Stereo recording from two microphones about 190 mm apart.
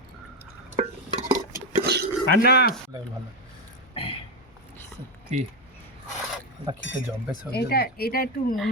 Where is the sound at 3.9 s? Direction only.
30° left (ahead or behind).